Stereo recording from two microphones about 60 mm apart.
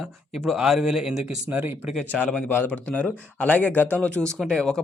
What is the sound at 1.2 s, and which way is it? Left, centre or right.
Speech, right.